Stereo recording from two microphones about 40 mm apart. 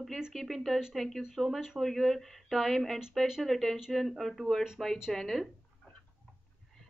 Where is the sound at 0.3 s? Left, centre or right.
Centre.